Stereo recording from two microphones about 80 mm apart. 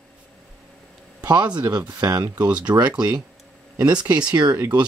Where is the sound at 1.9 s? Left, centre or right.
Right.